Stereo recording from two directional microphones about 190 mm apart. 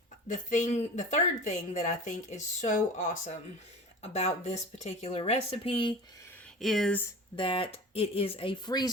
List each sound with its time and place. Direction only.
0.3 s speech: 40° left (ahead or behind)
6.6 s speech: centre (ahead or behind)
7.3 s speech: 25° left (ahead or behind)